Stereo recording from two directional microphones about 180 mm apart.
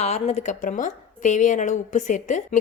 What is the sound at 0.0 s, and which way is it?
A woman's voice, 35° left (ahead or behind).